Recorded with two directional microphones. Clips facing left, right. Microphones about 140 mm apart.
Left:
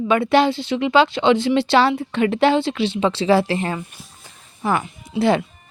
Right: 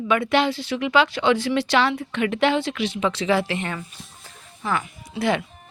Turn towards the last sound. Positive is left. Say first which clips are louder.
# left 5 dB
turn(degrees=30)  # may be behind; listen again after turning